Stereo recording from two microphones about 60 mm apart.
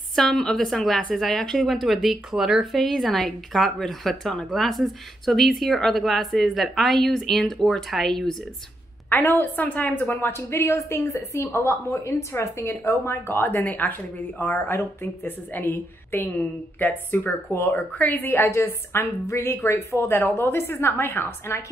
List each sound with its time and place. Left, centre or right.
0.3 s a woman's voice: centre
0.6 s a woman's voice: centre
9.1 s a woman's voice: left
10.5 s speech: left
11.1 s a woman's voice: left
11.4 s a woman's voice: left